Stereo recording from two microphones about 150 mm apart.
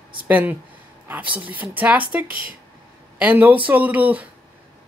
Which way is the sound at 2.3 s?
70° right (ahead or behind).